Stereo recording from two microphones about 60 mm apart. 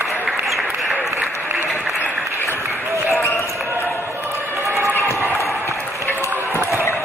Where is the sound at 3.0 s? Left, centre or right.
Left.